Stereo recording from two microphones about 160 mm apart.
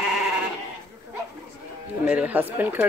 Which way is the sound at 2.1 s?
10° right (ahead or behind).